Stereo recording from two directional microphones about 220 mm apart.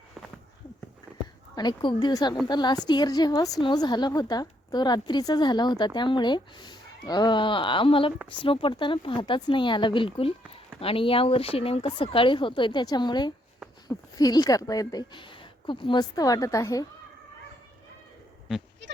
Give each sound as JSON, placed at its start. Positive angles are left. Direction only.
{"t": 1.5, "sound": "a woman's voice", "side_deg": 20}